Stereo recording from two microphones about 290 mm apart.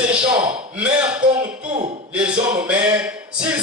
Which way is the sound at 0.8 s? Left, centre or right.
Centre.